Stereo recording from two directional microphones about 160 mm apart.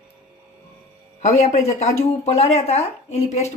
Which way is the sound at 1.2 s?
45° left (ahead or behind).